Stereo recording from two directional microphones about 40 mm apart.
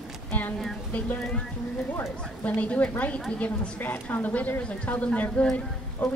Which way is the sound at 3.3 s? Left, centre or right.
Left.